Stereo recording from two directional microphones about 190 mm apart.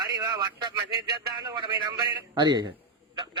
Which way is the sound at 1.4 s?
25° right (ahead or behind).